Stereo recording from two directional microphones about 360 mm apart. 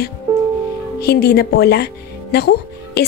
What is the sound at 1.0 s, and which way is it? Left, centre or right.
A woman's voice, left.